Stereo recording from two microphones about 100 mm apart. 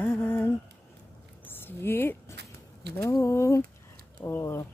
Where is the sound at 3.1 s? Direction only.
30° left (ahead or behind).